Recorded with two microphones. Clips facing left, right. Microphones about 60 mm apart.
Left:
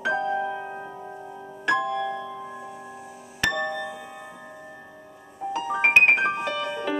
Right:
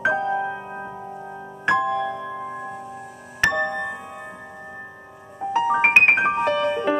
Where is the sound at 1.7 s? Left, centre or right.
Right.